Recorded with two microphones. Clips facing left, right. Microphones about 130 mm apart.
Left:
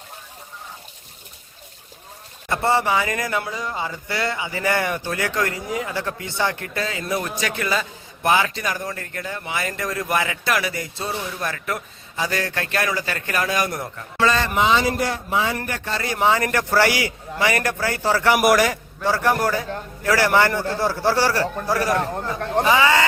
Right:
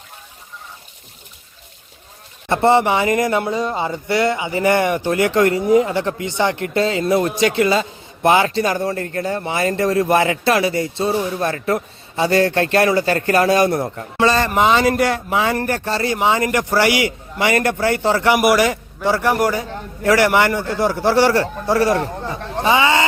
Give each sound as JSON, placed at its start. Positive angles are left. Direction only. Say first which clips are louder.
{"t": 2.5, "sound": "a man's voice", "louder": "right 6 dB", "side_deg": -25}
{"t": 14.4, "sound": "speech", "louder": "right 4 dB", "side_deg": -50}
{"t": 15.5, "sound": "a man's voice", "louder": "right 7 dB", "side_deg": -40}
{"t": 16.1, "sound": "speech", "louder": "even", "side_deg": -20}
{"t": 18.3, "sound": "a man's voice", "louder": "even", "side_deg": -5}
{"t": 18.6, "sound": "a man's voice", "louder": "right 3 dB", "side_deg": -20}